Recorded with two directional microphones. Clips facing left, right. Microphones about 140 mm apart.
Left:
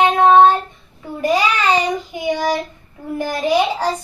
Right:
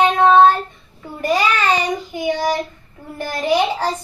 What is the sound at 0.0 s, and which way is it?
Child singing, 15° left (ahead or behind).